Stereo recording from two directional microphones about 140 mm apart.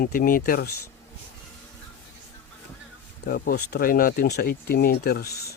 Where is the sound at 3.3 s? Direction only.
90° left.